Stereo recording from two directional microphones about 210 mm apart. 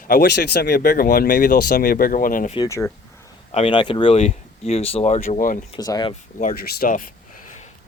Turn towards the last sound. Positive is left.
turn(degrees=40)  # may be behind; listen again after turning